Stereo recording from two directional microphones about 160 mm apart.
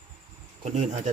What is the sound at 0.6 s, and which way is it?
Speech, 50° right (ahead or behind).